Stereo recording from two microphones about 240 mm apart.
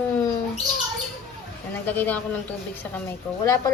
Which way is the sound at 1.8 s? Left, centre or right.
Centre.